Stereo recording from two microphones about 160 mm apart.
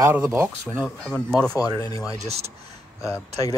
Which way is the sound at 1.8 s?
20° left (ahead or behind).